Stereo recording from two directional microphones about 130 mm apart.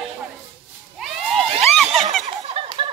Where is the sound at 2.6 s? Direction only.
45° right (ahead or behind).